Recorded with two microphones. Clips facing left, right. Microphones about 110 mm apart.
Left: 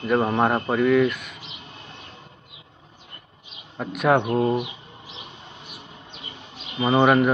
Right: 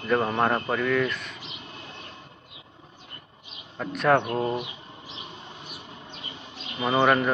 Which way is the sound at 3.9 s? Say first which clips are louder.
Left 2 dB; 5° left (ahead or behind).